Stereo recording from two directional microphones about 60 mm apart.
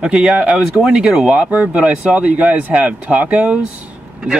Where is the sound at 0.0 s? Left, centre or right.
Centre.